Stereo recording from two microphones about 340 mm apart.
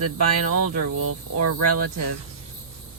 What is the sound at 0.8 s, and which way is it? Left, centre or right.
Speech, right.